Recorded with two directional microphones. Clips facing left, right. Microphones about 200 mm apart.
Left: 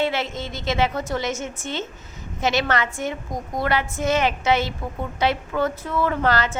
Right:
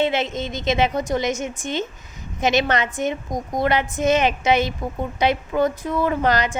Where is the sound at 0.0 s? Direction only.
20° right (ahead or behind).